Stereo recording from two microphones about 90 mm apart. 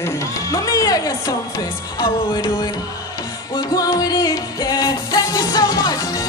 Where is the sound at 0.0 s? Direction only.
40° left (ahead or behind).